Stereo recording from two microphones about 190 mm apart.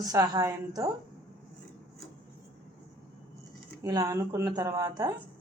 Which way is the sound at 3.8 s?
20° right (ahead or behind).